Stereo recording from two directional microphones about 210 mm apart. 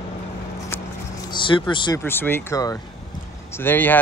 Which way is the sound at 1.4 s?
25° left (ahead or behind).